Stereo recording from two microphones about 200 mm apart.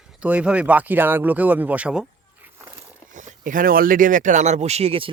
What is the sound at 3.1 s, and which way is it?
Speech, 40° right (ahead or behind).